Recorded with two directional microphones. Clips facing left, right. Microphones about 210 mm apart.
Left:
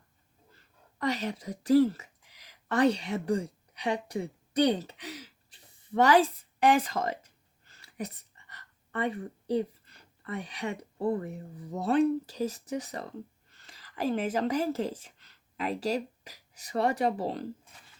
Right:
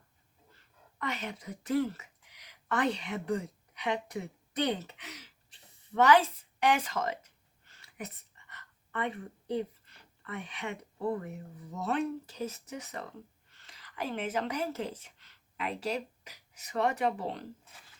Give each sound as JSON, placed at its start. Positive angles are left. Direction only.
{"t": 0.5, "sound": "speech", "side_deg": 35}
{"t": 7.6, "sound": "a sound", "side_deg": 35}
{"t": 11.7, "sound": "speech", "side_deg": 35}